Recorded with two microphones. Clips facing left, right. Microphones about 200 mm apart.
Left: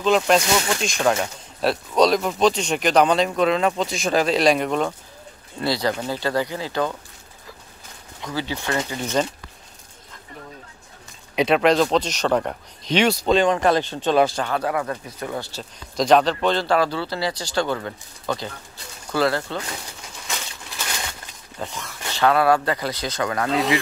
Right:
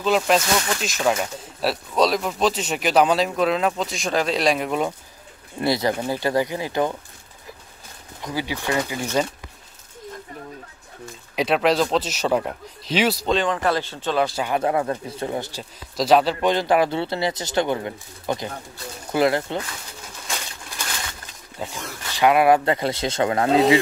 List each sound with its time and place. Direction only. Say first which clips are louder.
0.0 s speech: left 1 dB; 5° right (ahead or behind)
5.6 s speech: right 2 dB; 20° right (ahead or behind)
8.2 s speech: even; 15° right (ahead or behind)
11.3 s speech: left 2 dB; centre (ahead or behind)
13.3 s speech: left 4 dB; 15° left (ahead or behind)
14.3 s speech: right 1 dB; 10° right (ahead or behind)
14.6 s speech: right 3 dB; 25° right (ahead or behind)
16.0 s speech: even; 5° right (ahead or behind)
21.5 s speech: right 1 dB; 10° right (ahead or behind); by 23.8 s 25° right (ahead or behind)